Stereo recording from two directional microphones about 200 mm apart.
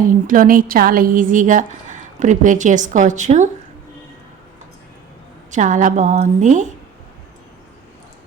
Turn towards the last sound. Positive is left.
turn(degrees=-40)  # may be behind; listen again after turning